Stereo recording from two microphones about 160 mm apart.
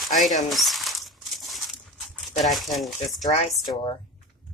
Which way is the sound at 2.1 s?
Centre (ahead or behind).